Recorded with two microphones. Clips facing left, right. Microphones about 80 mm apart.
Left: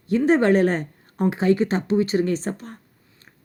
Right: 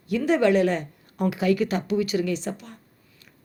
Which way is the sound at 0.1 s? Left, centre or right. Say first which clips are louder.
Left 3 dB; left.